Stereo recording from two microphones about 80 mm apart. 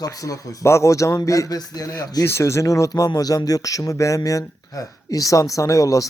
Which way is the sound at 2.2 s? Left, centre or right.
Left.